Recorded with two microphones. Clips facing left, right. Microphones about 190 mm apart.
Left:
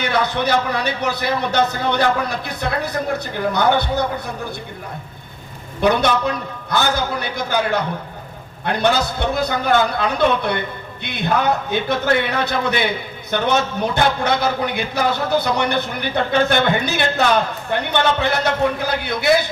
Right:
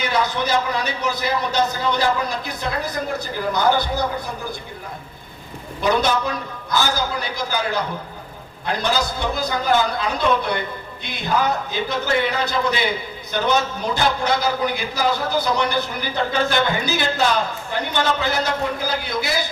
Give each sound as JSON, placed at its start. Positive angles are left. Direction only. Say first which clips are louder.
{"t": 0.0, "sound": "a man's voice", "louder": "left 2 dB", "side_deg": 60}
{"t": 5.8, "sound": "a man's voice", "louder": "left 3 dB", "side_deg": 60}